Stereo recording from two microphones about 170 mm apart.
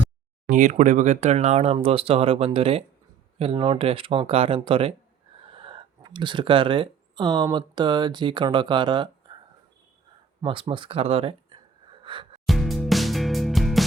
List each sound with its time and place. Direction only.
0.5 s speech: 45° right (ahead or behind); by 9.4 s 25° right (ahead or behind)
10.4 s speech: 30° right (ahead or behind)
12.0 s music: 30° right (ahead or behind)
12.5 s music: centre (ahead or behind)